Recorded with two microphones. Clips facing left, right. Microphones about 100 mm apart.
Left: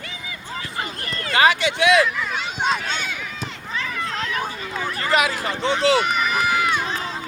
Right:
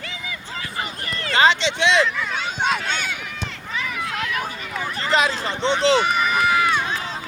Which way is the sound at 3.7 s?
10° right (ahead or behind).